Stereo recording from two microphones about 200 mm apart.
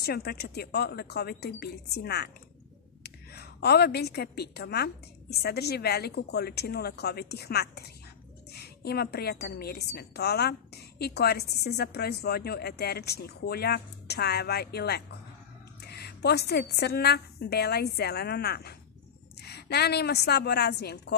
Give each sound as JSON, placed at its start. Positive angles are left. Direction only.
{"t": 0.0, "sound": "a woman's voice", "side_deg": 50}